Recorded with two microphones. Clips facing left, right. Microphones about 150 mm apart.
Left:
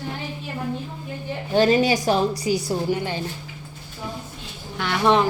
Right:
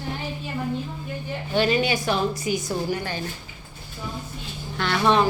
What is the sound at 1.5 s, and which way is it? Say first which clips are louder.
A woman's voice: left 4 dB; 40° left (ahead or behind).